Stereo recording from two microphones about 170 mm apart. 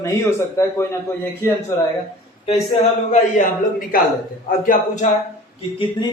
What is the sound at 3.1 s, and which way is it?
A man's voice, 50° left (ahead or behind).